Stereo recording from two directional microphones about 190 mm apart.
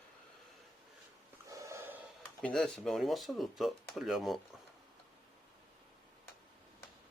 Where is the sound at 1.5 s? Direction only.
15° right (ahead or behind).